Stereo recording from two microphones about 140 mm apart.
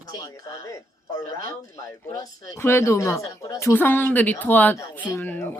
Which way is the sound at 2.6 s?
15° left (ahead or behind).